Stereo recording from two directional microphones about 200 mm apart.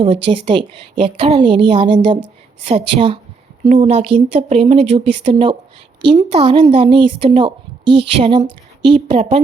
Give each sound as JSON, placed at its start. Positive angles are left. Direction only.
{"t": 0.0, "sound": "a woman's voice", "side_deg": -25}